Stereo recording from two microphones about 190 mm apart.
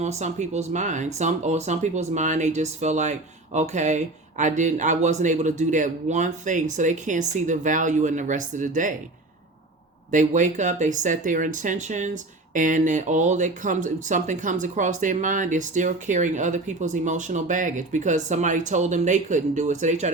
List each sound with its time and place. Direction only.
0.0 s speech: 35° right (ahead or behind)
10.1 s speech: 40° right (ahead or behind)